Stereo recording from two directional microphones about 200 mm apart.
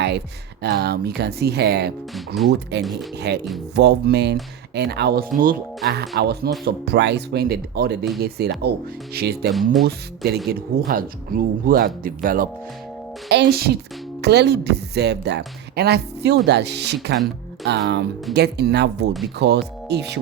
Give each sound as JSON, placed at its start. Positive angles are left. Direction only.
{"t": 0.6, "sound": "speech", "side_deg": -55}
{"t": 2.1, "sound": "speech", "side_deg": 0}
{"t": 2.5, "sound": "speech", "side_deg": -55}